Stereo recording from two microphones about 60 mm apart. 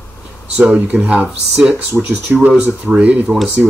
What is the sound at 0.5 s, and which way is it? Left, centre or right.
Speech, centre.